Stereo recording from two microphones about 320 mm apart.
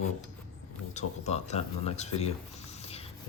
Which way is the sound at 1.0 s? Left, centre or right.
Left.